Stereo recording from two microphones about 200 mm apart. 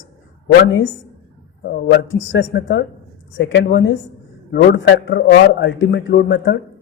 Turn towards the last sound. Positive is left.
turn(degrees=65)  # may be behind; listen again after turning